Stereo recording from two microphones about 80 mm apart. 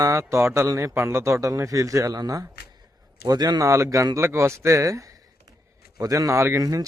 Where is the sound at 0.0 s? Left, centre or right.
Right.